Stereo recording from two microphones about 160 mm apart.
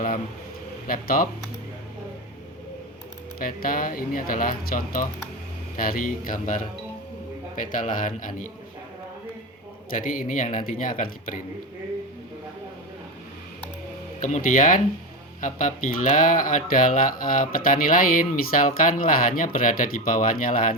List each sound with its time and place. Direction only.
0.9 s speech: 65° left (ahead or behind)
3.3 s speech: 65° left (ahead or behind)
9.9 s speech: 55° left (ahead or behind)
14.2 s speech: 50° left (ahead or behind)